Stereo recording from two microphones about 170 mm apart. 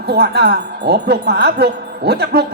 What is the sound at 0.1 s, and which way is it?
Speech, 70° right (ahead or behind).